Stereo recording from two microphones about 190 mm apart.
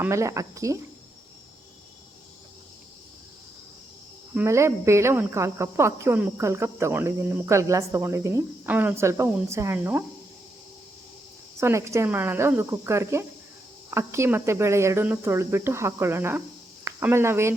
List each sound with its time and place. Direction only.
0.0 s speech: 15° right (ahead or behind)
4.4 s speech: 15° right (ahead or behind)
11.6 s speech: 15° right (ahead or behind)